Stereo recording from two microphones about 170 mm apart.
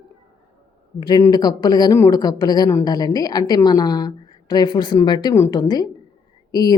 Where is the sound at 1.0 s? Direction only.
25° left (ahead or behind).